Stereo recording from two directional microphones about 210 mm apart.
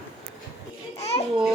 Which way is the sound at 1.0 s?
30° left (ahead or behind).